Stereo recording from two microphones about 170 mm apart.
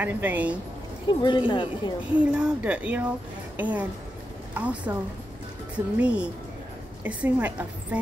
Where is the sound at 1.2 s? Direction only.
30° left (ahead or behind).